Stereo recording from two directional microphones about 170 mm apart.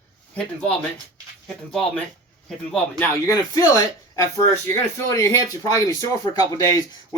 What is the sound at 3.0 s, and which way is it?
Speech, 20° left (ahead or behind).